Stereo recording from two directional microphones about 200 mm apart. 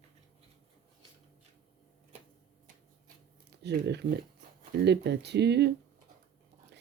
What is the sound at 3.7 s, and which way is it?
Speech, 60° right (ahead or behind).